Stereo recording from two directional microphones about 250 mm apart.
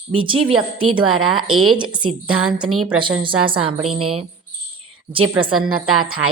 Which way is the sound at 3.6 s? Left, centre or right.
Right.